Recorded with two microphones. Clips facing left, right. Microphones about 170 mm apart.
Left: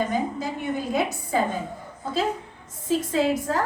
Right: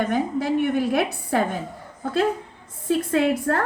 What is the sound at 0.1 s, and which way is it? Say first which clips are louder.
A woman's voice: right 5 dB; 65° right (ahead or behind).